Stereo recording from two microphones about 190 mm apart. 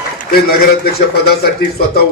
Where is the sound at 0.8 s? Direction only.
55° left (ahead or behind).